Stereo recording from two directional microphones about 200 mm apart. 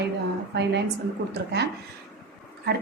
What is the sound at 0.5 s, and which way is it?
Speech, 55° right (ahead or behind).